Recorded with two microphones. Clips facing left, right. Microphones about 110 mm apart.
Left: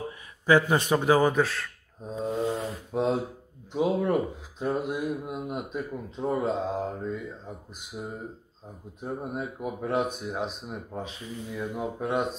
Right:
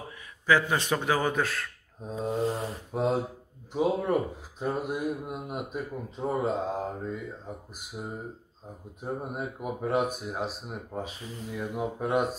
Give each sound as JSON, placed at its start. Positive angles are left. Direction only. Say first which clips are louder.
{"t": 0.5, "sound": "a man's voice", "louder": "left 3 dB", "side_deg": 20}
{"t": 1.3, "sound": "speech", "louder": "left 3 dB", "side_deg": 0}